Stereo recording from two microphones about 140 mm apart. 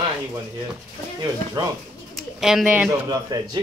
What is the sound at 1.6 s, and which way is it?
Speech, 30° right (ahead or behind).